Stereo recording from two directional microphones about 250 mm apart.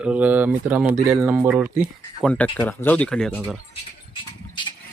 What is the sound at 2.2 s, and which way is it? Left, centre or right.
Speech, centre.